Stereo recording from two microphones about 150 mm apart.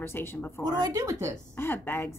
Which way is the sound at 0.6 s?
25° right (ahead or behind).